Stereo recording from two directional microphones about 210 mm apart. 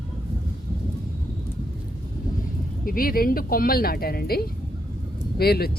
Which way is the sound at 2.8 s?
45° left (ahead or behind).